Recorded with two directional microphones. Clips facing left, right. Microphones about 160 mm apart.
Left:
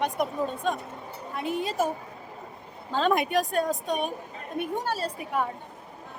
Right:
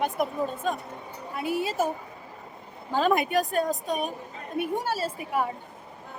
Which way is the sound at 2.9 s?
5° right (ahead or behind).